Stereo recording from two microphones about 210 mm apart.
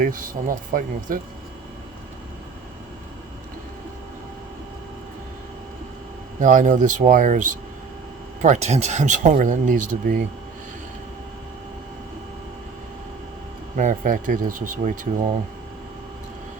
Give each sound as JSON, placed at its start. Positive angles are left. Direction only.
{"t": 0.0, "sound": "speech", "side_deg": -40}
{"t": 6.4, "sound": "speech", "side_deg": -35}
{"t": 13.7, "sound": "speech", "side_deg": -40}